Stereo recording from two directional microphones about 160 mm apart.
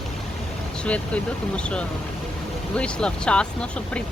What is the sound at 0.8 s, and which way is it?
Speech, 5° left (ahead or behind).